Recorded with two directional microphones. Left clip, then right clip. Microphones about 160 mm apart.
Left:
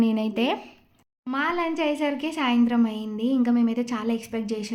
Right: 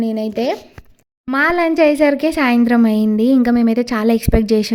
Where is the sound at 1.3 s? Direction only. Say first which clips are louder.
Right 11 dB; 65° right (ahead or behind).